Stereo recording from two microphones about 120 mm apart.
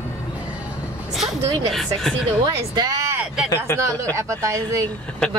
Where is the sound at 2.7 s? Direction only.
30° right (ahead or behind).